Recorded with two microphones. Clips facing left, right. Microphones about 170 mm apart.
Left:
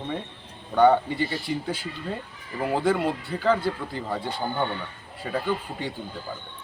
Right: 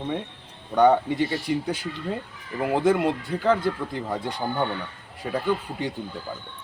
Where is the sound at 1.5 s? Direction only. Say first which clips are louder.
Right 4 dB; 65° right (ahead or behind).